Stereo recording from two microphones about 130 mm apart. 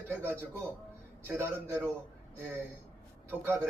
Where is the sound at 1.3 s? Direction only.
15° right (ahead or behind).